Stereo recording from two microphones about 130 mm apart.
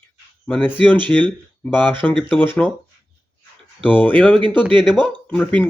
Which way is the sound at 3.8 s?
10° left (ahead or behind).